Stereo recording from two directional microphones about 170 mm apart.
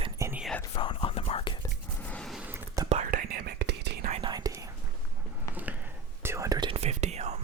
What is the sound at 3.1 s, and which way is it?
Whispering, 60° right (ahead or behind).